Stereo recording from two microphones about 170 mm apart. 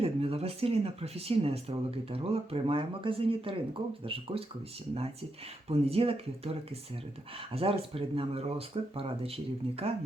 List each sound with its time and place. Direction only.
0.0 s speech: 35° right (ahead or behind)
5.6 s speech: 35° right (ahead or behind)